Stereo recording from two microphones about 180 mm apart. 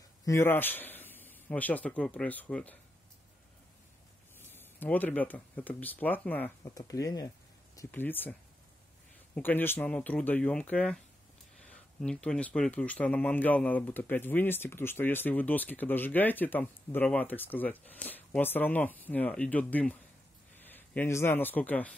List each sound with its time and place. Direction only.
0.2 s speech: 15° left (ahead or behind)
4.4 s speech: 10° left (ahead or behind)